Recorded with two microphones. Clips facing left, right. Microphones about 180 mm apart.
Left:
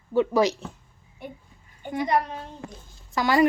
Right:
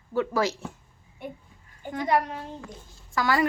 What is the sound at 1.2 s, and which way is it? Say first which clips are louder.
Speech: right 1 dB; centre (ahead or behind).